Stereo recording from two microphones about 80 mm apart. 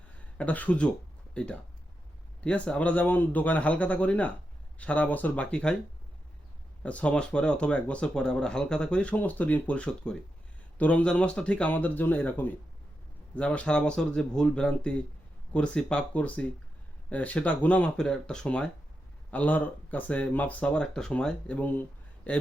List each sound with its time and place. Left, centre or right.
0.3 s a man's voice: centre
6.8 s a man's voice: centre